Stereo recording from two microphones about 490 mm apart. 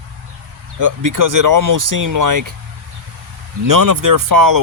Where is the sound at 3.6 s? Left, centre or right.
Right.